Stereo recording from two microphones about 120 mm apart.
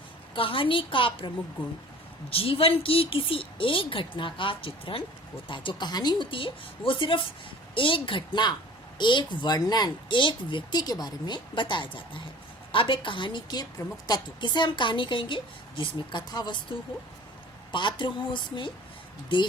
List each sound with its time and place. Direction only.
0.3 s a woman's voice: 45° left (ahead or behind)